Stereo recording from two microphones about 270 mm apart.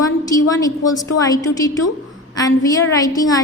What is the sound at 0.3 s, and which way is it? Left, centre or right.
A woman's voice, centre.